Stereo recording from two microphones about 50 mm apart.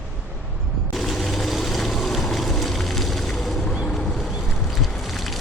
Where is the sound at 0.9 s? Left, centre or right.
Centre.